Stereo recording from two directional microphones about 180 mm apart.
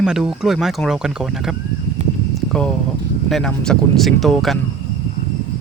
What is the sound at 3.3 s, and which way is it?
Speech, 5° left (ahead or behind).